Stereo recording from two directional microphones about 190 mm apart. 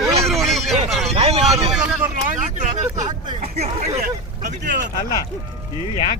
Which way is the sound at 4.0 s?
45° right (ahead or behind).